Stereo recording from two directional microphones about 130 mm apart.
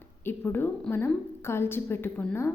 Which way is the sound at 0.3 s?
15° left (ahead or behind).